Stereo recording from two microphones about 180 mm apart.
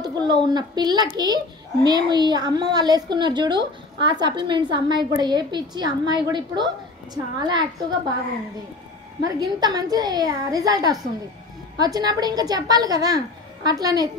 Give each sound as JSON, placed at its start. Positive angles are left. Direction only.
{"t": 0.0, "sound": "a child's voice", "side_deg": -25}
{"t": 9.2, "sound": "a child's voice", "side_deg": -20}